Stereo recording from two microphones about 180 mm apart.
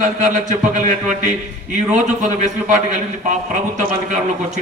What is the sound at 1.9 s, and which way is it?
A man's voice, 40° right (ahead or behind).